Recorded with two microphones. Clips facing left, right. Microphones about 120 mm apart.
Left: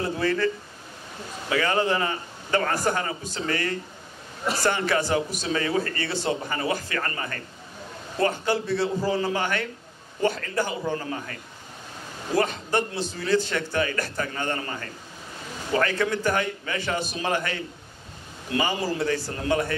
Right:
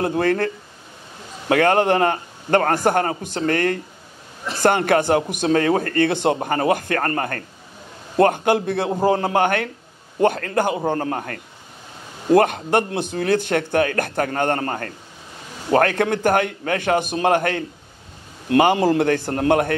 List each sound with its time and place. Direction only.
0.0 s a man's voice: 55° right (ahead or behind)
1.5 s a man's voice: 60° right (ahead or behind)